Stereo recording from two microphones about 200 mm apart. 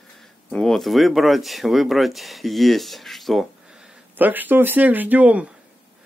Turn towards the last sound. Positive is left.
turn(degrees=-5)  # may be behind; listen again after turning